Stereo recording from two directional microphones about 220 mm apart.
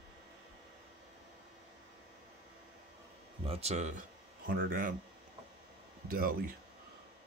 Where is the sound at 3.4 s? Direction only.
30° right (ahead or behind).